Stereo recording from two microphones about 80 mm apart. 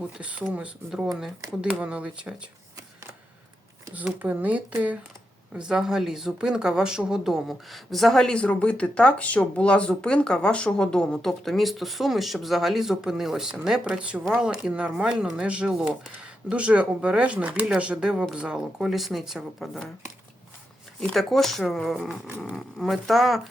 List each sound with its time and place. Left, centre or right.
0.2 s speech: centre
3.9 s speech: centre
5.5 s speech: centre
21.1 s speech: centre